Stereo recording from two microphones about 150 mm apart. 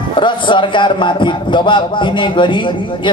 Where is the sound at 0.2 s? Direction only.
35° left (ahead or behind).